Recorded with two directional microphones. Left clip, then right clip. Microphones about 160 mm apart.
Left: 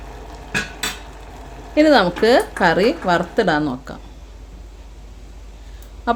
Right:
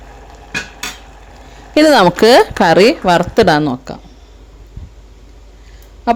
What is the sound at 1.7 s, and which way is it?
Speech, 90° right.